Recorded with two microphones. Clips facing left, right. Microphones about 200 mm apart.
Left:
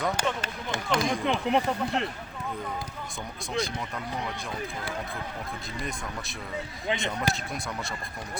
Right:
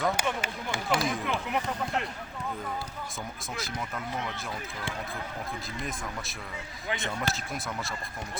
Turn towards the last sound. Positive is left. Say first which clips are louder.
# left 3 dB
turn(degrees=15)  # may be behind; listen again after turning